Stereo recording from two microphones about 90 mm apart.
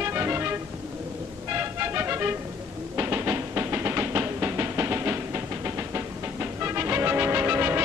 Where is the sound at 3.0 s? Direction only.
25° right (ahead or behind).